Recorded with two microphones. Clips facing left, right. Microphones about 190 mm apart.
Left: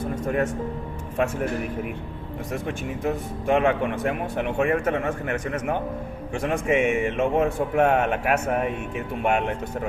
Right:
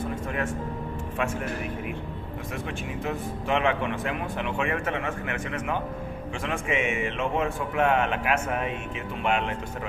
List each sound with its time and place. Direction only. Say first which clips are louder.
2.5 s speech: left 5 dB; 45° left (ahead or behind)